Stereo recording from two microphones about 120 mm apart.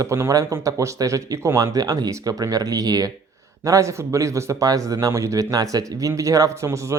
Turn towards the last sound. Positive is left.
turn(degrees=-25)  # may be behind; listen again after turning